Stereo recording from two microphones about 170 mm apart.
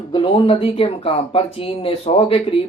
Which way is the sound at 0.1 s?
30° left (ahead or behind).